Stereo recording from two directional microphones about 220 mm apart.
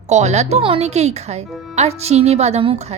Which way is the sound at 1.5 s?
Centre (ahead or behind).